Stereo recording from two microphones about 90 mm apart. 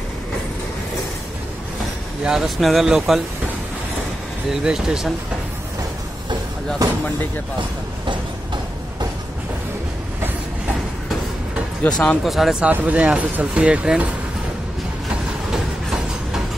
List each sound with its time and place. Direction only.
2.2 s speech: 5° right (ahead or behind)
4.5 s speech: 5° right (ahead or behind)
11.8 s speech: 15° left (ahead or behind)
12.2 s speech: centre (ahead or behind)